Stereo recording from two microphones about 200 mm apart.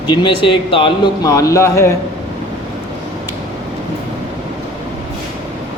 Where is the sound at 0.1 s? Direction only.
25° left (ahead or behind).